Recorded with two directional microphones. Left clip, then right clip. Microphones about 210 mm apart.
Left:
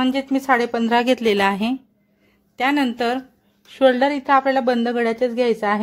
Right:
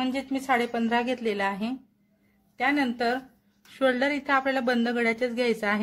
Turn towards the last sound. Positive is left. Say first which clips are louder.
# left 7 dB
turn(degrees=20)  # may be behind; listen again after turning